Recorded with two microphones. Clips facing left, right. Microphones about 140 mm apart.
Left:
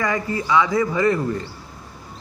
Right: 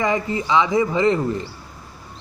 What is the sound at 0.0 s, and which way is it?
Speech, 20° right (ahead or behind).